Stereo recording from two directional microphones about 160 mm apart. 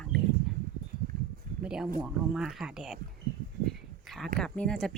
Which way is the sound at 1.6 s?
5° right (ahead or behind).